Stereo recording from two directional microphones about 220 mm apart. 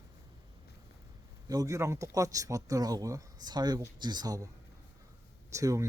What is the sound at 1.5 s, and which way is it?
Speech, 15° right (ahead or behind).